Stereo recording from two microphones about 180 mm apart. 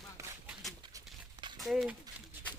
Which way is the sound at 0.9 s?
25° right (ahead or behind).